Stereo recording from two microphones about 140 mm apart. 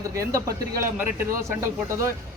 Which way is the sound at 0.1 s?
25° right (ahead or behind).